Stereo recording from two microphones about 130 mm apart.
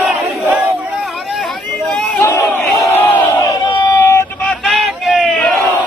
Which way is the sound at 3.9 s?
20° left (ahead or behind).